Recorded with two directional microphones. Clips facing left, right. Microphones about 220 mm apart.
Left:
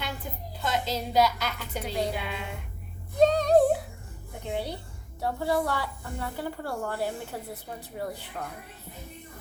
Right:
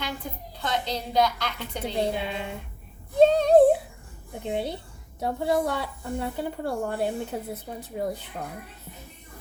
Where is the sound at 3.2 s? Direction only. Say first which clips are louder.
Right 4 dB; 25° right (ahead or behind).